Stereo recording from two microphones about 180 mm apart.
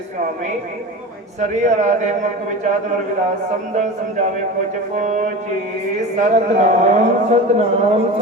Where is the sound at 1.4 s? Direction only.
40° right (ahead or behind).